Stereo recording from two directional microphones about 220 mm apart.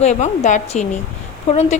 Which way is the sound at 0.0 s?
30° left (ahead or behind).